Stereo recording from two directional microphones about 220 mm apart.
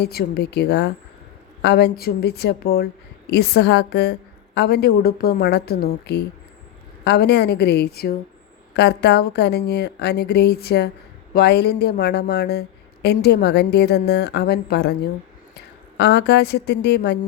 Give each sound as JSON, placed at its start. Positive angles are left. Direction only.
{"t": 0.0, "sound": "speech", "side_deg": 45}